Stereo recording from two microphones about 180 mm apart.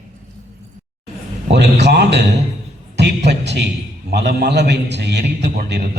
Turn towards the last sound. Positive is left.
turn(degrees=-65)  # may be behind; listen again after turning